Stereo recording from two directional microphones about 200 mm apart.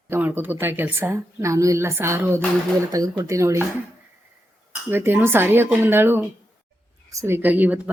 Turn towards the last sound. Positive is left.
turn(degrees=-10)  # may be behind; listen again after turning